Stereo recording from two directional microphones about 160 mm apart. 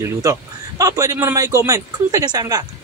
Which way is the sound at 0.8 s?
20° right (ahead or behind).